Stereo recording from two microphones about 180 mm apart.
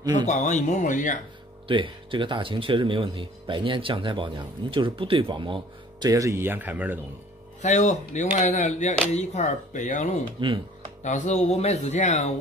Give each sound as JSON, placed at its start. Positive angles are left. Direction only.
{"t": 0.3, "sound": "speech", "side_deg": 40}
{"t": 1.7, "sound": "speech", "side_deg": -25}
{"t": 7.6, "sound": "speech", "side_deg": 40}